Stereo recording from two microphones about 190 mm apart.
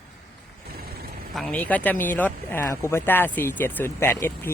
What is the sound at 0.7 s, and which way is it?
Vehicle, 55° right (ahead or behind).